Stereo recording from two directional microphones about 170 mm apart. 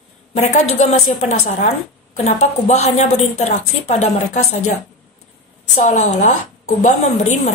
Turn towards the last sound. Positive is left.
turn(degrees=45)  # may be behind; listen again after turning